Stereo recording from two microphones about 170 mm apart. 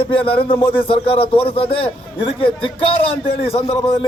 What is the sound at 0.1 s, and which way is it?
A man's voice, 30° left (ahead or behind).